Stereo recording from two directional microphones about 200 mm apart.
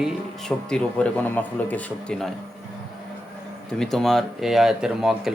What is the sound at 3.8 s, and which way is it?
Speech, centre (ahead or behind).